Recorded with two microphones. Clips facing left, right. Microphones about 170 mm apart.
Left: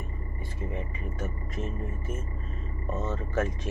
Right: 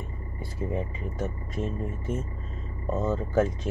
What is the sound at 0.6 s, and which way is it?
Speech, 35° right (ahead or behind).